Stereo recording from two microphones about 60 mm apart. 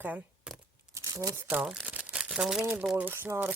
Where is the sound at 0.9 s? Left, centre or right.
Right.